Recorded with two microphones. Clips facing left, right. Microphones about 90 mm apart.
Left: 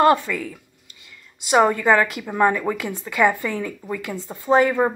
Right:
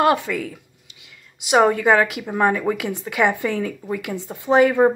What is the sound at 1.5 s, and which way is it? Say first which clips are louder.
Speech: right 1 dB; 15° right (ahead or behind).